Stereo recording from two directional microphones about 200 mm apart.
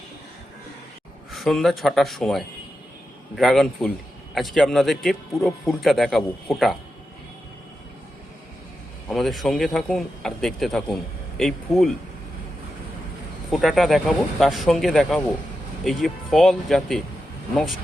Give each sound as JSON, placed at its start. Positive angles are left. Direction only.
{"t": 1.3, "sound": "speech", "side_deg": 0}
{"t": 9.0, "sound": "speech", "side_deg": 0}
{"t": 13.5, "sound": "speech", "side_deg": 0}